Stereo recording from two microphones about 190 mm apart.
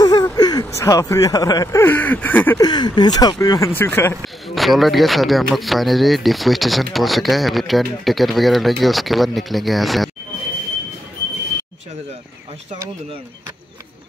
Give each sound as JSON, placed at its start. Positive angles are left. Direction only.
{"t": 0.0, "sound": "speech", "side_deg": 20}
{"t": 2.6, "sound": "speech", "side_deg": 20}
{"t": 4.6, "sound": "speech", "side_deg": 0}